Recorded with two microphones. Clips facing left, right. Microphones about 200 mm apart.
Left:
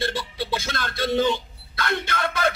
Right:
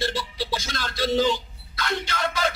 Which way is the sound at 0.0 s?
60° left (ahead or behind).